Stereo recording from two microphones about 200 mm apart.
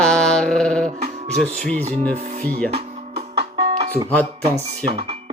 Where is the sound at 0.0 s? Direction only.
5° left (ahead or behind).